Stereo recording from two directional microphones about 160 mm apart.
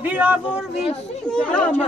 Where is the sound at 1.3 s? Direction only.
5° left (ahead or behind).